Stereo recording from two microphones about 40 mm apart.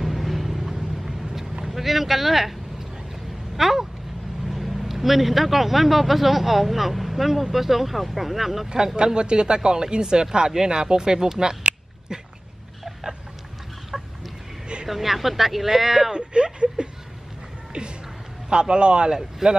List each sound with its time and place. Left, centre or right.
0.0 s vehicle: centre
1.7 s speech: centre
3.5 s a sound: centre
4.5 s a man's voice: centre
8.6 s speech: centre
13.9 s chicken: centre
14.9 s speech: centre
17.7 s music: right
18.5 s speech: right
19.4 s speech: centre